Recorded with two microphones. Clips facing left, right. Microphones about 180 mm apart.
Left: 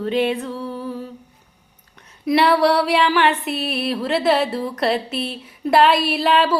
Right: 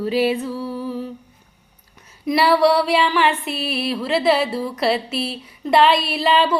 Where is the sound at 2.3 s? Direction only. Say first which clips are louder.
Even; centre (ahead or behind).